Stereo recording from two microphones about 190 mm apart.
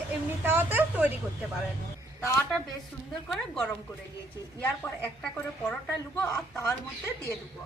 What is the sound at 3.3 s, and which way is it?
A woman's voice, 5° left (ahead or behind).